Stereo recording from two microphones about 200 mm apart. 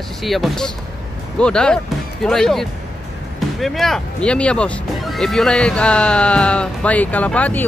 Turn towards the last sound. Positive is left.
turn(degrees=5)  # may be behind; listen again after turning